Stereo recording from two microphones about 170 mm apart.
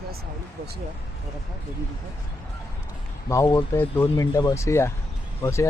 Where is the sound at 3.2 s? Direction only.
20° left (ahead or behind).